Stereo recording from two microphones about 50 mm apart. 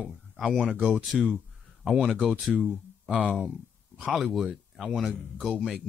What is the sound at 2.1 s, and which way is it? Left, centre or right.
Speech, right.